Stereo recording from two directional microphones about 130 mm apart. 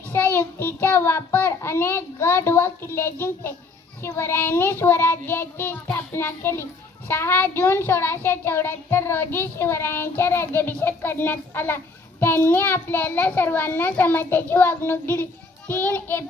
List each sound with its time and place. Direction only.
0.1 s child singing: 15° left (ahead or behind)
4.0 s a child's voice: 20° left (ahead or behind)